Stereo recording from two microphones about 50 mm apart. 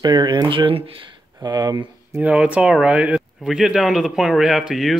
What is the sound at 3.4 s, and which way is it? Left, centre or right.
Speech, centre.